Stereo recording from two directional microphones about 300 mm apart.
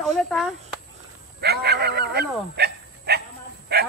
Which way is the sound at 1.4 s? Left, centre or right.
Right.